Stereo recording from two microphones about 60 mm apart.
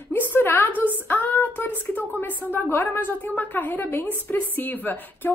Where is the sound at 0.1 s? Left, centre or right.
Left.